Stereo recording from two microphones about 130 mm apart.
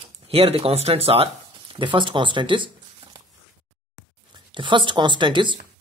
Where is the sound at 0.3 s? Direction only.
50° right (ahead or behind).